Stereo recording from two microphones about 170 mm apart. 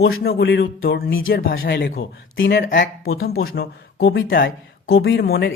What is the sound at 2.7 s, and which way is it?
Speech, 70° left (ahead or behind).